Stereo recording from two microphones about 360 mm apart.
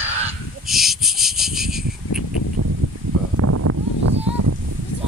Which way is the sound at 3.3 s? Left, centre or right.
Right.